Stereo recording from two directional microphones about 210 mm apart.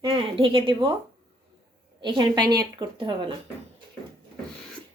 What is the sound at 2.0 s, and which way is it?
A woman's voice, 20° right (ahead or behind).